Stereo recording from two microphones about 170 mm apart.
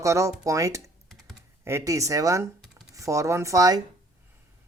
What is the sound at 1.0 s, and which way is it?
Computer keyboard, centre (ahead or behind).